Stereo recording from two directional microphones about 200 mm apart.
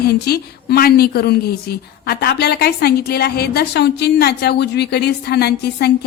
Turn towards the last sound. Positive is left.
turn(degrees=55)  # may be behind; listen again after turning